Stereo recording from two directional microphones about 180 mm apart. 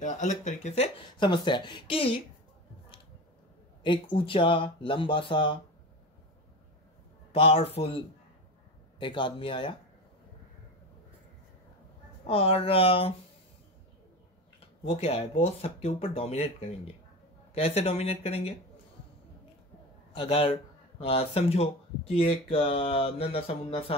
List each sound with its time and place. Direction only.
0.0 s speech: 40° left (ahead or behind)
3.8 s speech: 25° left (ahead or behind)
7.3 s speech: 30° left (ahead or behind)
9.0 s speech: 25° left (ahead or behind)
12.3 s speech: 30° left (ahead or behind)
14.6 s speech: 35° left (ahead or behind)
20.1 s a man's voice: 30° left (ahead or behind)